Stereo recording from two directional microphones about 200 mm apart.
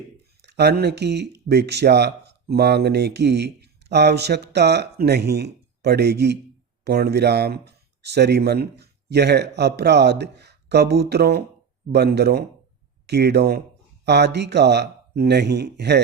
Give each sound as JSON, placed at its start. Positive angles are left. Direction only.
{"t": 0.4, "sound": "speech", "side_deg": -55}